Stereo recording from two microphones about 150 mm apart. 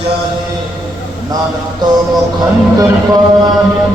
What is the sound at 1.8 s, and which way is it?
Music, 25° right (ahead or behind).